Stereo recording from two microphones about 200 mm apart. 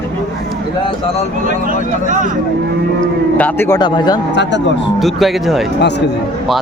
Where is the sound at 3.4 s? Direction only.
15° left (ahead or behind).